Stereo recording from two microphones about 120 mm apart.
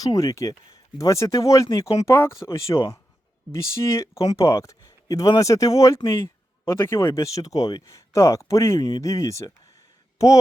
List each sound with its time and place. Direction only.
0.0 s speech: 30° left (ahead or behind)